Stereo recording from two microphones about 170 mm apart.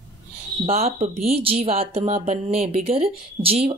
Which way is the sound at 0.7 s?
35° right (ahead or behind).